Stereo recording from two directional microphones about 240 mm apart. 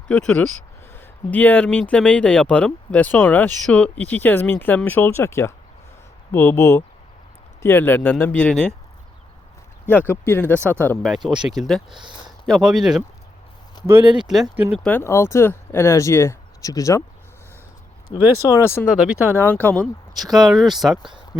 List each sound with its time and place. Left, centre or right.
0.1 s speech: centre
10.1 s speech: centre
11.9 s speech: centre
12.5 s speech: centre
14.0 s speech: centre
14.3 s speech: centre
14.8 s speech: centre
18.1 s speech: centre
18.9 s speech: centre
19.4 s speech: centre